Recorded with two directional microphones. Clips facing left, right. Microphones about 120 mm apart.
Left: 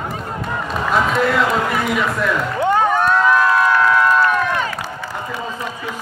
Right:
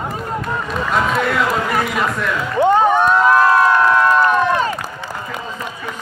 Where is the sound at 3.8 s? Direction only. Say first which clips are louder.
Right 1 dB; 20° right (ahead or behind).